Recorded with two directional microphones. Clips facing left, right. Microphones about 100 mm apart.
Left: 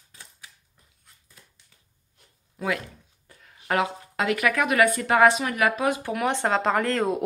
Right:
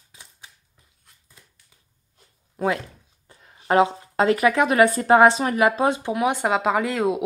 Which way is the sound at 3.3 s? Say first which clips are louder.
Right 6 dB; 25° right (ahead or behind).